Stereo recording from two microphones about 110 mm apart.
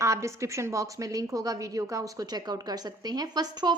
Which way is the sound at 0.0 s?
30° right (ahead or behind).